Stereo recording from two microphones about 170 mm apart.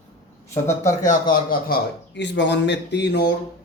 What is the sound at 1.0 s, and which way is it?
A man's voice, 50° left (ahead or behind).